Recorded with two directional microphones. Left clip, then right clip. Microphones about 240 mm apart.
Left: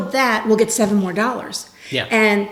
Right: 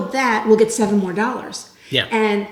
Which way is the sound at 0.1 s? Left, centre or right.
Centre.